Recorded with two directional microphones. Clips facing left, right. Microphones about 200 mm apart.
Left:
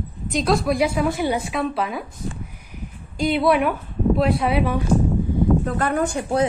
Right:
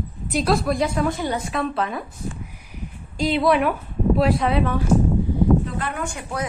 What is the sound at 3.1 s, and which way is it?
A woman's voice, centre (ahead or behind).